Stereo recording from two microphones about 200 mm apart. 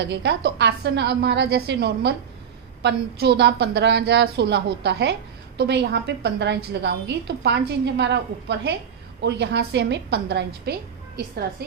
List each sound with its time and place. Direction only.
0.0 s a woman's voice: 60° right (ahead or behind)